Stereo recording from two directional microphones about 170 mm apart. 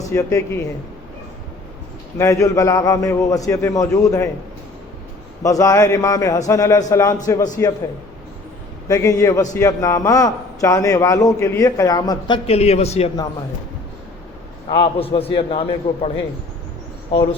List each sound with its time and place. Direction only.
0.0 s speech: 15° left (ahead or behind)
2.1 s a man's voice: 20° left (ahead or behind)
5.4 s a man's voice: 20° left (ahead or behind)
8.9 s a man's voice: 20° left (ahead or behind)
12.5 s a man's voice: 40° left (ahead or behind)
14.7 s a man's voice: 30° left (ahead or behind)